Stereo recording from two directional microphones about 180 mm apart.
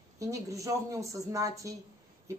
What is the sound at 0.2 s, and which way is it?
Speech, 20° right (ahead or behind).